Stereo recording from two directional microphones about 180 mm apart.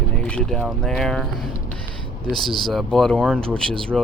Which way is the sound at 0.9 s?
5° left (ahead or behind).